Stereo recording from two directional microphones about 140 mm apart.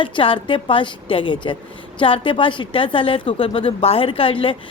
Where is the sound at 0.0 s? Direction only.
40° left (ahead or behind).